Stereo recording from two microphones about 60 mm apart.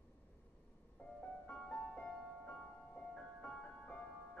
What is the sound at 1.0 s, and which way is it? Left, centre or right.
Music, left.